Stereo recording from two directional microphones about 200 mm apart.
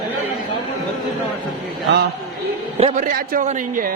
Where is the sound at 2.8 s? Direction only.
40° right (ahead or behind).